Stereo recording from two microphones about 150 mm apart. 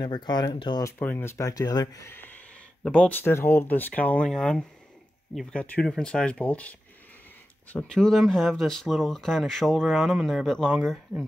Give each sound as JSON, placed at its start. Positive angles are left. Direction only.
{"t": 0.0, "sound": "speech", "side_deg": 30}
{"t": 0.8, "sound": "speech", "side_deg": 15}
{"t": 2.8, "sound": "speech", "side_deg": 5}
{"t": 7.7, "sound": "speech", "side_deg": 5}